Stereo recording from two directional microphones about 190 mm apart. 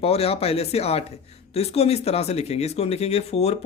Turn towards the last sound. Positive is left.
turn(degrees=35)  # may be behind; listen again after turning